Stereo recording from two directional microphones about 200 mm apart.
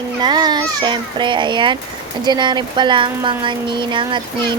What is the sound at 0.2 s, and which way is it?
A child's voice, 20° right (ahead or behind).